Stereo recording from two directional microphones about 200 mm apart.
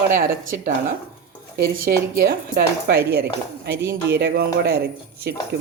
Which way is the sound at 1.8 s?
45° right (ahead or behind).